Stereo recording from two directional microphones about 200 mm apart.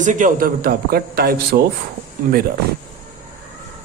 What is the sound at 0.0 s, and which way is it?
Speech, 40° right (ahead or behind).